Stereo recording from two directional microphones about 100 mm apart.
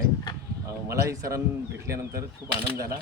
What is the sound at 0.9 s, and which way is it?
A man's voice, 30° right (ahead or behind).